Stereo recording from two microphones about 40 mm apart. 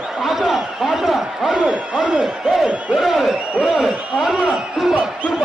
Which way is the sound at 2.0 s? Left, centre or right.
Centre.